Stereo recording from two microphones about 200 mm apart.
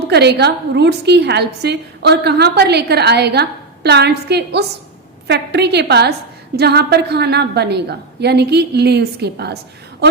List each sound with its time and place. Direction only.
0.1 s a woman's voice: 55° right (ahead or behind)